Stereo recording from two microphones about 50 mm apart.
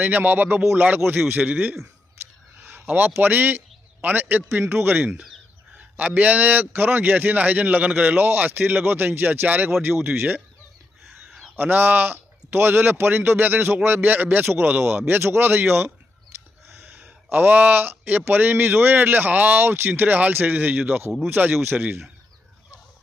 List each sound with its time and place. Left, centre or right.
0.0 s a man's voice: right
2.6 s a sound: right
3.2 s a man's voice: right
5.7 s a man's voice: right
8.1 s a man's voice: right
11.0 s a sound: centre
11.5 s a man's voice: right
17.3 s a man's voice: right
19.9 s a man's voice: right
21.5 s a man's voice: right